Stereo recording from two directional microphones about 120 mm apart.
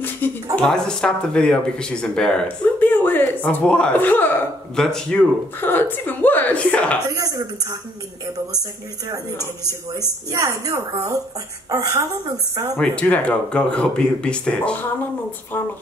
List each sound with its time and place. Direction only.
0.2 s speech: 15° left (ahead or behind)
0.6 s speech: 5° left (ahead or behind)
4.7 s speech: 5° left (ahead or behind)
5.6 s speech: 15° left (ahead or behind)
7.1 s a woman's voice: 30° right (ahead or behind)
10.3 s a woman's voice: 30° right (ahead or behind)
12.7 s speech: 10° left (ahead or behind)